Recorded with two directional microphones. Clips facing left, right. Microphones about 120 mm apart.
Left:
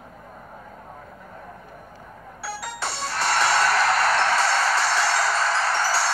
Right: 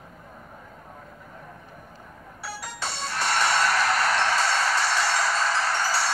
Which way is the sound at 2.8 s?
40° left (ahead or behind).